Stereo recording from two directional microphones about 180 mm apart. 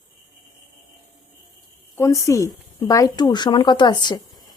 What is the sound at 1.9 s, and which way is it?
Speech, 15° left (ahead or behind).